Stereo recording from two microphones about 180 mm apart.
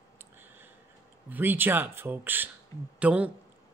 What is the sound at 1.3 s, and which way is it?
Speech, 10° right (ahead or behind).